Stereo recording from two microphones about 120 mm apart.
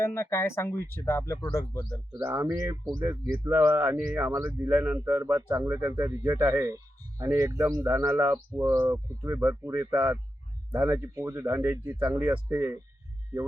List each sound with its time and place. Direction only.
0.0 s speech: 20° left (ahead or behind)
2.1 s a man's voice: 25° right (ahead or behind)